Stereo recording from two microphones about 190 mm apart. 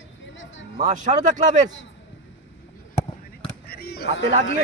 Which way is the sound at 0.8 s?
40° right (ahead or behind).